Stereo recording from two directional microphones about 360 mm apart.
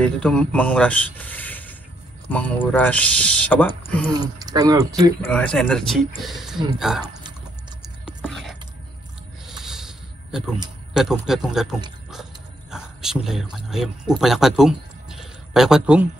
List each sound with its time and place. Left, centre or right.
0.2 s speech: centre
4.1 s speech: centre
5.2 s speech: centre
7.8 s a sound: centre
12.7 s speech: centre